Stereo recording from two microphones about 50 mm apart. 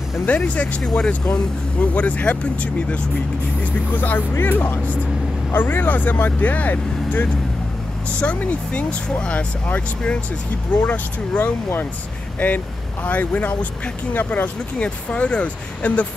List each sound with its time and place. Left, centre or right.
0.3 s speech: left
3.9 s speech: left
11.3 s speech: left
14.8 s speech: left